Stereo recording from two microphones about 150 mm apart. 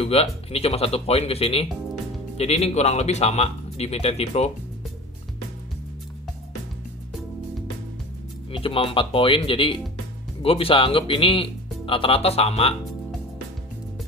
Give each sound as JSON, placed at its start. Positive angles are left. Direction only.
{"t": 0.0, "sound": "speech", "side_deg": 40}
{"t": 8.5, "sound": "speech", "side_deg": 35}